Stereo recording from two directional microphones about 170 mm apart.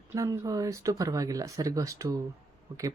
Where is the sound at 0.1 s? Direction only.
20° right (ahead or behind).